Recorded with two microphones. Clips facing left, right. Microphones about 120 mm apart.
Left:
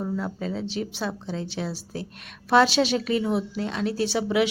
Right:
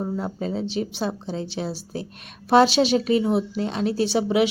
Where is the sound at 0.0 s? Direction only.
25° right (ahead or behind).